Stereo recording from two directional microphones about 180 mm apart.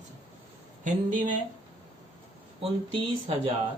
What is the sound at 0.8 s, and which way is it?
Speech, 45° right (ahead or behind).